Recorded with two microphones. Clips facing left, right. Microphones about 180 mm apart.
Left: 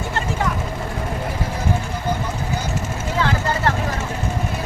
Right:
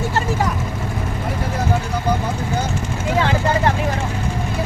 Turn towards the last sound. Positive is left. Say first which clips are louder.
# right 3 dB
turn(degrees=-15)  # may be behind; listen again after turning